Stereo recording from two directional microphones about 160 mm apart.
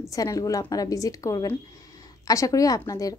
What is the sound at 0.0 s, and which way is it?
A woman's voice, 20° left (ahead or behind).